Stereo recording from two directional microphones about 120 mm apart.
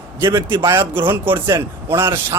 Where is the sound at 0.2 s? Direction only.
20° right (ahead or behind).